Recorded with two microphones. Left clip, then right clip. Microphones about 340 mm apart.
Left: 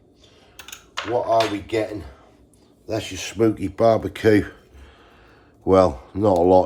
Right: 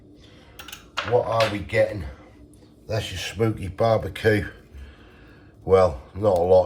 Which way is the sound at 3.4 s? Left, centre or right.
Left.